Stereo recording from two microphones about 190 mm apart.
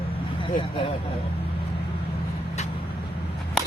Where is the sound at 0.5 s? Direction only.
25° left (ahead or behind).